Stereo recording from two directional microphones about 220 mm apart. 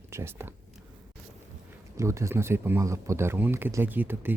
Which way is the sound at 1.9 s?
15° right (ahead or behind).